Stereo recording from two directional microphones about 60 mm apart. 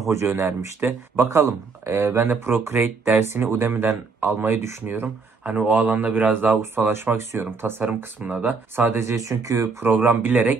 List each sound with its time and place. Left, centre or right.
0.1 s speech: right
5.0 s speech: right
6.6 s speech: right
7.8 s speech: right
9.1 s speech: right
9.8 s speech: right